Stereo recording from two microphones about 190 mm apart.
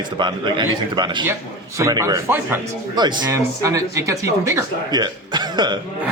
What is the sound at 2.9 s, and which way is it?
Speech, 20° right (ahead or behind).